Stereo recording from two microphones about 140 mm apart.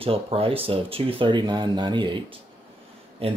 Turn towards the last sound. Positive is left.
turn(degrees=-45)  # may be behind; listen again after turning